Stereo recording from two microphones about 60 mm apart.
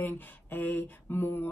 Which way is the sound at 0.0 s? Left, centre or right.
Left.